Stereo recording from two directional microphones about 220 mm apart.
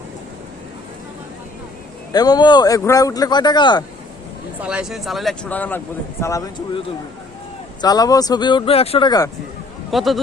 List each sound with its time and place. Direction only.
2.1 s speech: 20° left (ahead or behind)
4.6 s speech: 5° right (ahead or behind); by 6.4 s 10° left (ahead or behind)
7.8 s speech: 15° left (ahead or behind)
9.9 s speech: centre (ahead or behind)